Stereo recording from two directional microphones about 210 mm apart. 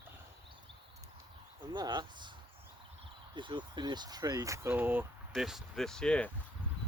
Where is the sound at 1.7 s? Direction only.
20° right (ahead or behind).